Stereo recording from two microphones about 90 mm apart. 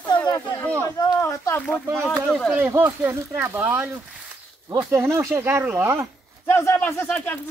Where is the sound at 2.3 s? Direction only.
5° left (ahead or behind).